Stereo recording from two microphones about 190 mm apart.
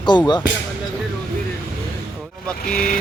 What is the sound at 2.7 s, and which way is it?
Speech, 45° left (ahead or behind).